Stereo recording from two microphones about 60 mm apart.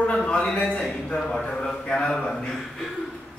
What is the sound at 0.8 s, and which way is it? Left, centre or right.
Speech, centre.